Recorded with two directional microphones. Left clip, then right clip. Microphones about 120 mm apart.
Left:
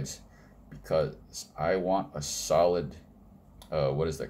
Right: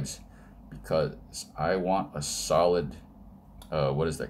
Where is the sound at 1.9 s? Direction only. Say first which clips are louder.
Right 1 dB; 5° left (ahead or behind).